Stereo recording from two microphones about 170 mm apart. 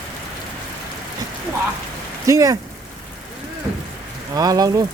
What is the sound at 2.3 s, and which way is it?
Speech, 20° right (ahead or behind).